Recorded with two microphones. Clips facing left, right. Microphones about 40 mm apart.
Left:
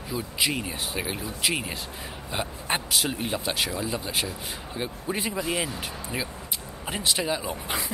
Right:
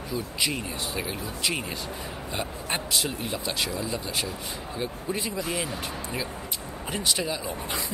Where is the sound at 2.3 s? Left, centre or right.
Centre.